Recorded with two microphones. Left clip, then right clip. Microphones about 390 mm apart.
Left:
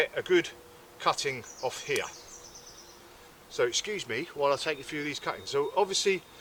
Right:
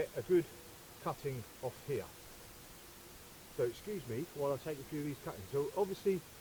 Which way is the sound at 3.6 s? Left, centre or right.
Centre.